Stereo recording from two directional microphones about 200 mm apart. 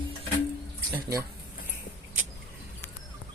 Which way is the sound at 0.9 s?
15° right (ahead or behind).